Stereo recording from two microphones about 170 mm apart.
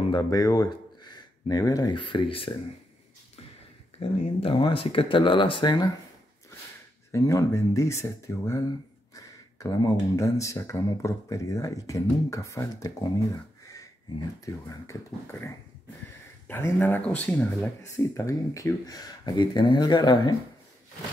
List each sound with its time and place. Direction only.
0.1 s speech: 20° left (ahead or behind)
4.0 s speech: 30° left (ahead or behind)
7.1 s speech: 15° left (ahead or behind)